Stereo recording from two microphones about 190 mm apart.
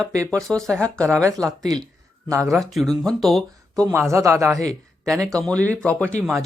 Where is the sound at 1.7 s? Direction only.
20° right (ahead or behind).